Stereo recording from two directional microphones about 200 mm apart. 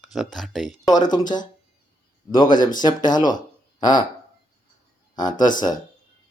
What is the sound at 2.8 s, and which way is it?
Speech, 20° left (ahead or behind).